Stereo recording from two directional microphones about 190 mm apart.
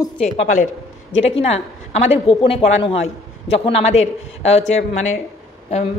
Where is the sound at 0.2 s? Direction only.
40° left (ahead or behind).